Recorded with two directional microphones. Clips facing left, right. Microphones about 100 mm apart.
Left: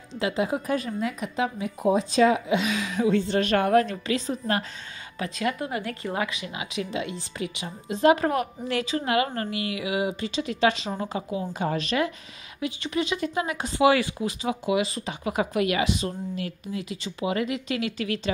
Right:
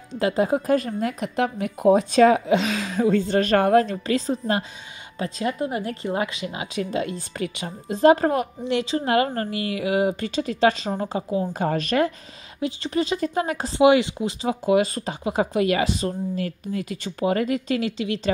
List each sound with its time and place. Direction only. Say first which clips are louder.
0.2 s speech: right 5 dB; 40° right (ahead or behind)
1.2 s speech: right 3 dB; 60° right (ahead or behind)
2.3 s speech: right 4 dB; 35° right (ahead or behind)
12.5 s speech: right 3 dB; 35° right (ahead or behind)
13.7 s speech: right 4 dB; 25° right (ahead or behind); by 15.1 s 45° right (ahead or behind)
15.2 s speech: right 3 dB; 30° right (ahead or behind)
17.9 s speech: right 2 dB; 25° right (ahead or behind)